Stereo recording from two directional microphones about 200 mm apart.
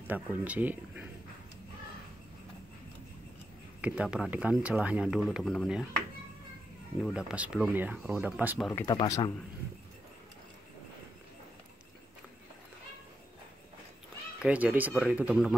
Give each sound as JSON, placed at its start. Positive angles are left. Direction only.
{"t": 0.1, "sound": "speech", "side_deg": -10}
{"t": 3.8, "sound": "speech", "side_deg": -5}
{"t": 7.0, "sound": "speech", "side_deg": 0}
{"t": 8.8, "sound": "speech", "side_deg": 15}
{"t": 14.4, "sound": "speech", "side_deg": -5}